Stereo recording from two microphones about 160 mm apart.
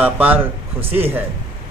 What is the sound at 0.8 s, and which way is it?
Speech, 35° right (ahead or behind).